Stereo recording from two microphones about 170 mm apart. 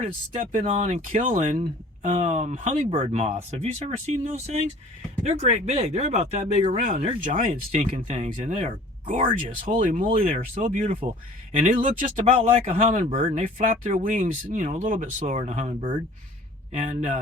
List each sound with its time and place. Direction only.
0.0 s speech: 40° right (ahead or behind)